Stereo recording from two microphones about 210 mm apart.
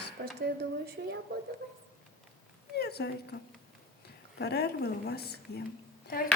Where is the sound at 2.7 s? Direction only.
50° left (ahead or behind).